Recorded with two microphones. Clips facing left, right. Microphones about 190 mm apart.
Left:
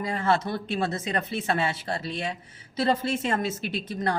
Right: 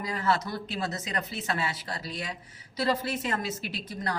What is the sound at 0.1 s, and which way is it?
A woman's voice, 25° left (ahead or behind).